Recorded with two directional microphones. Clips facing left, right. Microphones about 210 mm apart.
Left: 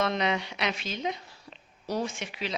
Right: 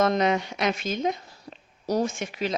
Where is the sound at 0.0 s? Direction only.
45° right (ahead or behind).